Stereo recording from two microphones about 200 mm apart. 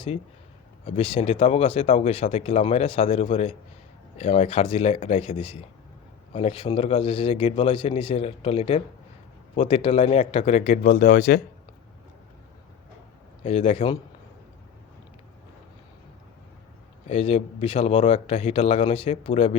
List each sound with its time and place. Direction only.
0.9 s speech: 30° left (ahead or behind)
13.4 s speech: 30° left (ahead or behind)
17.1 s speech: 30° left (ahead or behind)